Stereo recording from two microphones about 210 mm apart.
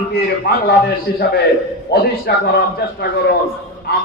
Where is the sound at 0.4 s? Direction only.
50° left (ahead or behind).